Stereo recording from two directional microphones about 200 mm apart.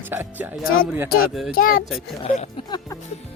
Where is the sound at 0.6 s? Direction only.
90° left.